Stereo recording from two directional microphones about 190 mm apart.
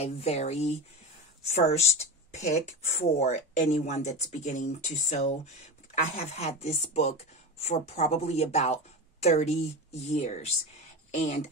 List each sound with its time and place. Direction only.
0.0 s speech: 35° left (ahead or behind)